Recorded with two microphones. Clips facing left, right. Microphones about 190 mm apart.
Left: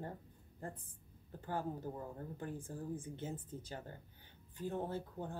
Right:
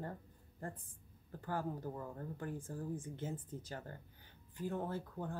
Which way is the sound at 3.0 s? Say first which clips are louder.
Right 1 dB; 20° left (ahead or behind).